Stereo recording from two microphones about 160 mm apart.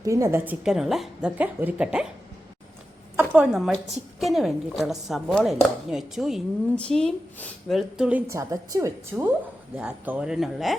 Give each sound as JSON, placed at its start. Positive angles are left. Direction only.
{"t": 0.0, "sound": "a woman's voice", "side_deg": -20}
{"t": 0.6, "sound": "speech", "side_deg": 0}
{"t": 3.2, "sound": "a woman's voice", "side_deg": -10}
{"t": 8.3, "sound": "a woman's voice", "side_deg": -20}
{"t": 9.7, "sound": "speech", "side_deg": -10}